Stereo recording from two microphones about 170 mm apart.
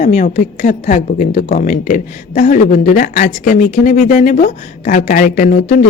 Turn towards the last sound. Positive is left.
turn(degrees=50)  # may be behind; listen again after turning